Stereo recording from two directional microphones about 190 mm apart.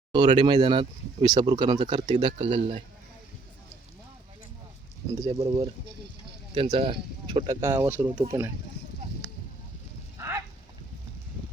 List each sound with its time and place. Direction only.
0.1 s speech: 25° right (ahead or behind)
5.4 s speech: 30° right (ahead or behind); by 8.0 s 10° right (ahead or behind)
8.0 s speech: 20° right (ahead or behind)
10.2 s a sound: 15° right (ahead or behind)